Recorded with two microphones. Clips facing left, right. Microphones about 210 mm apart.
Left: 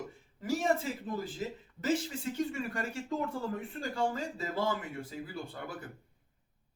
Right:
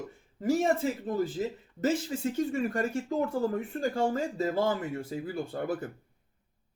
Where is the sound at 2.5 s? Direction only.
45° right (ahead or behind).